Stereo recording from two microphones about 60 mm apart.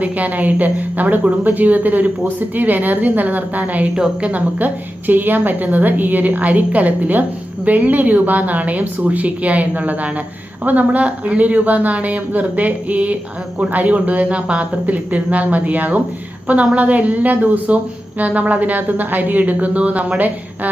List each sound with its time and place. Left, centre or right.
0.0 s a woman's voice: right
3.9 s a woman's voice: centre
4.3 s a woman's voice: right